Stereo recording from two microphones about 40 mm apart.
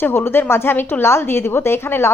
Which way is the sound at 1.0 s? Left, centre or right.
Left.